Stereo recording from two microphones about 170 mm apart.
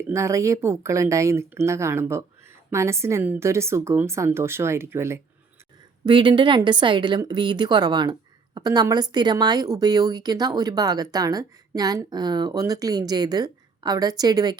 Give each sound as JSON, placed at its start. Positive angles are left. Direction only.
{"t": 0.1, "sound": "a woman's voice", "side_deg": -15}
{"t": 6.1, "sound": "speech", "side_deg": -30}